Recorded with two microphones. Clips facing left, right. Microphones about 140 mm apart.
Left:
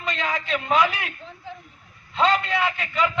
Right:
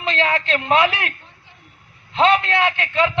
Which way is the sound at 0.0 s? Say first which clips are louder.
Right 6 dB; 70° right (ahead or behind).